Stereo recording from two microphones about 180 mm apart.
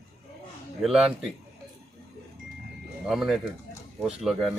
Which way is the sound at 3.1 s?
Centre (ahead or behind).